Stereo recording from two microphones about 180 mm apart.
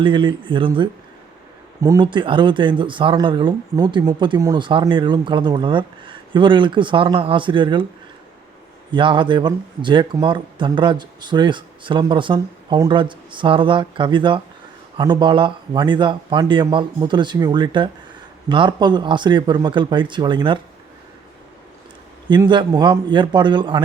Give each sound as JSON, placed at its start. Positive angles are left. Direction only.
{"t": 0.0, "sound": "speech", "side_deg": -25}
{"t": 8.9, "sound": "speech", "side_deg": -25}
{"t": 22.3, "sound": "speech", "side_deg": -25}